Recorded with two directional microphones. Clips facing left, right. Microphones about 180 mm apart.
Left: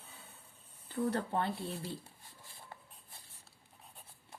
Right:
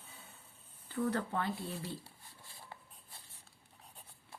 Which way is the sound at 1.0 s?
30° left (ahead or behind).